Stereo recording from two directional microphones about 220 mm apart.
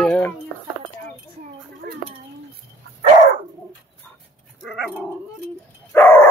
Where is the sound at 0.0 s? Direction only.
5° left (ahead or behind).